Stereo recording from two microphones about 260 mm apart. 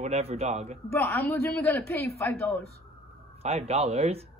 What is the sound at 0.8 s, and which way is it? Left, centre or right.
A man's voice, centre.